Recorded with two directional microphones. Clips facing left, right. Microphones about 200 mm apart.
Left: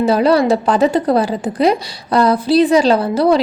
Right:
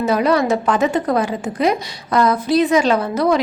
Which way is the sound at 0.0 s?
30° left (ahead or behind).